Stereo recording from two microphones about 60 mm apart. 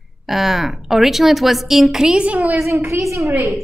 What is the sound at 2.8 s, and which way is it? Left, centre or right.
Speech, right.